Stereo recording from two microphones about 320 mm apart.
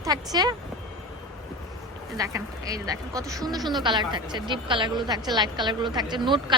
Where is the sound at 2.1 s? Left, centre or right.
Centre.